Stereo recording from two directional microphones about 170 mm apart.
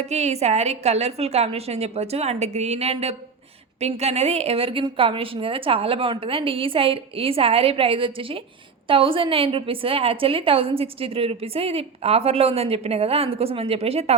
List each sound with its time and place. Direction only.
0.0 s a woman's voice: 40° right (ahead or behind)